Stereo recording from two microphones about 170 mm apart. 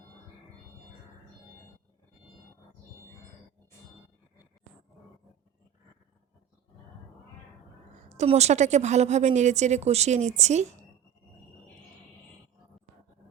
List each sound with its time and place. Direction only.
8.1 s a woman's voice: 40° right (ahead or behind)